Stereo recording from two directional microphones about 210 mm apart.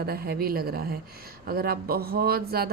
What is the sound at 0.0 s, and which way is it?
A woman's voice, 45° right (ahead or behind).